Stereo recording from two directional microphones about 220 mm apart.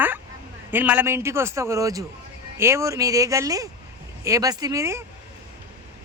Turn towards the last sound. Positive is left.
turn(degrees=-15)  # may be behind; listen again after turning